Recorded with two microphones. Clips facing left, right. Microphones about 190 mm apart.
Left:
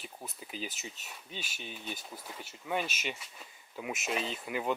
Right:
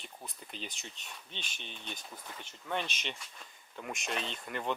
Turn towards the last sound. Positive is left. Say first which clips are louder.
# left 3 dB
turn(degrees=5)  # may be behind; listen again after turning